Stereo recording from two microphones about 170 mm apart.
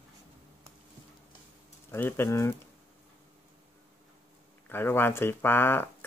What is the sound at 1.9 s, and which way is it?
Speech, 15° left (ahead or behind).